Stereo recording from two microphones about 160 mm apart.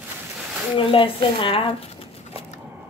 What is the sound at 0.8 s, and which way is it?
Speech, 35° left (ahead or behind).